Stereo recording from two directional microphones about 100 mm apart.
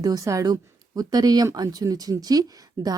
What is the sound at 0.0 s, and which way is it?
Speech, 35° right (ahead or behind).